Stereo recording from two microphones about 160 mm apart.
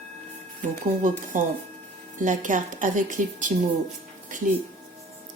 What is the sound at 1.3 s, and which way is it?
A woman's voice, 55° right (ahead or behind).